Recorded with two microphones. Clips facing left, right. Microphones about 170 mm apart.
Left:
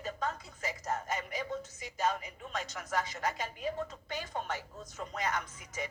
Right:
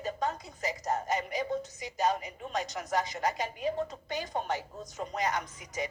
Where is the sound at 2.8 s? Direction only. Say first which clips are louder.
Right 2 dB; 35° right (ahead or behind).